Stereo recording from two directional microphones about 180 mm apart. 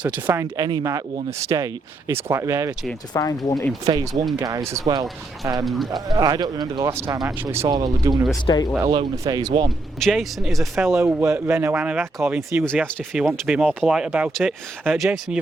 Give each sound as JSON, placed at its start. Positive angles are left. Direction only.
{"t": 0.0, "sound": "speech", "side_deg": -10}
{"t": 3.1, "sound": "speech", "side_deg": 20}
{"t": 3.8, "sound": "speech", "side_deg": -20}
{"t": 5.6, "sound": "speech", "side_deg": 0}
{"t": 6.1, "sound": "speech", "side_deg": -20}
{"t": 8.4, "sound": "speech", "side_deg": 20}
{"t": 8.8, "sound": "speech", "side_deg": -20}
{"t": 10.0, "sound": "speech", "side_deg": 0}
{"t": 11.0, "sound": "speech", "side_deg": -15}